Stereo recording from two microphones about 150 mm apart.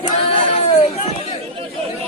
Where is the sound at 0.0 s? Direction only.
40° left (ahead or behind).